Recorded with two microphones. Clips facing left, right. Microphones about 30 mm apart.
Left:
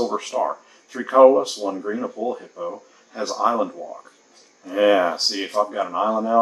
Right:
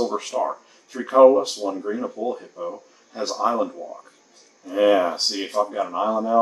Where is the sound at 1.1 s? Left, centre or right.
Left.